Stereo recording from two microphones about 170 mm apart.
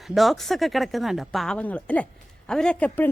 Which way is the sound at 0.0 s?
Centre (ahead or behind).